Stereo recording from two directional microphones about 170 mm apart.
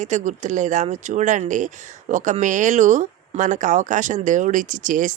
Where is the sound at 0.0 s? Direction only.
45° right (ahead or behind).